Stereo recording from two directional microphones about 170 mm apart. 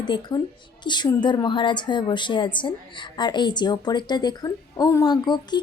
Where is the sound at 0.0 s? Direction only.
25° left (ahead or behind).